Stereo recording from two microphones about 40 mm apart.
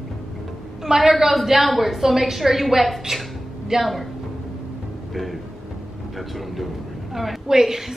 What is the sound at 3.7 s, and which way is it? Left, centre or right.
Speech, centre.